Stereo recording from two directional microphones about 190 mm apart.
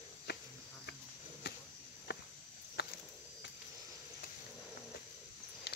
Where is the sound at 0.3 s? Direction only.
60° left (ahead or behind).